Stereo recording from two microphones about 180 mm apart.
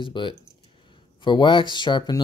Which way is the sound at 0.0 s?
25° left (ahead or behind).